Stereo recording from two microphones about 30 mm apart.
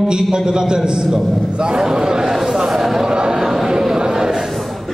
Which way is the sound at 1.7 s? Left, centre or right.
Centre.